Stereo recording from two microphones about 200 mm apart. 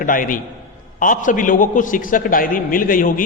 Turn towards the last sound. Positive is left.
turn(degrees=45)  # may be behind; listen again after turning